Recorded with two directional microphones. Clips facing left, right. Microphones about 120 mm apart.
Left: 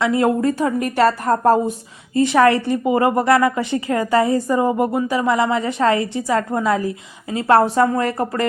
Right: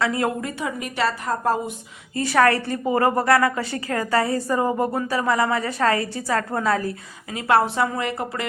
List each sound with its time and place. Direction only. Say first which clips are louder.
0.0 s a woman's voice: left 7 dB; 25° left (ahead or behind)
0.6 s a woman's voice: left 6 dB; 45° left (ahead or behind)
2.1 s a woman's voice: left 5 dB; 20° left (ahead or behind)
7.3 s speech: left 5 dB; 35° left (ahead or behind)